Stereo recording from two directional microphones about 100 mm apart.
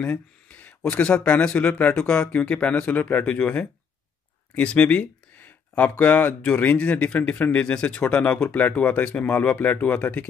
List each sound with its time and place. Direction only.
0.0 s speech: 15° left (ahead or behind)